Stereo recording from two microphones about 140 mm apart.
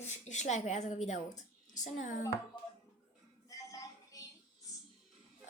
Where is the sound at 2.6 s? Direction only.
30° left (ahead or behind).